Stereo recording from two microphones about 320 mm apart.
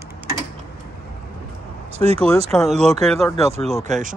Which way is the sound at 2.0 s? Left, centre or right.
Centre.